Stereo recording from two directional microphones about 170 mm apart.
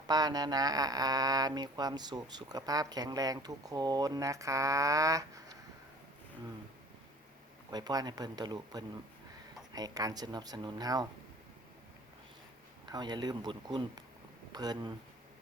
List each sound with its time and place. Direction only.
0.1 s speech: 25° right (ahead or behind)
7.7 s speech: 25° right (ahead or behind)
12.8 s speech: 25° right (ahead or behind)